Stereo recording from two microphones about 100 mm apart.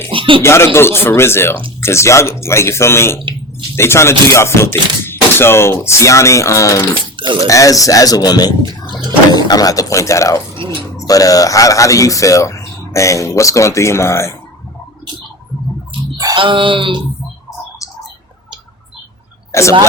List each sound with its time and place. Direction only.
0.1 s speech: 60° right (ahead or behind)
0.4 s speech: 25° left (ahead or behind)
16.3 s speech: 55° right (ahead or behind)
19.5 s speech: 30° left (ahead or behind)